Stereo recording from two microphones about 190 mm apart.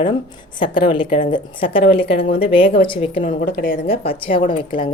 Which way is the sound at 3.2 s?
45° left (ahead or behind).